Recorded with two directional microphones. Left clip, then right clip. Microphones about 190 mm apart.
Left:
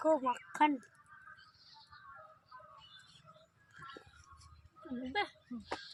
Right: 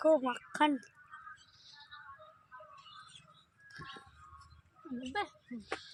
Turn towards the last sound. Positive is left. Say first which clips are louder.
# left 1 dB
turn(degrees=-10)  # may be behind; listen again after turning